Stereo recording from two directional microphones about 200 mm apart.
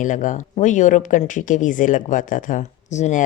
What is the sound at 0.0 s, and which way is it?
A woman's voice, 40° left (ahead or behind).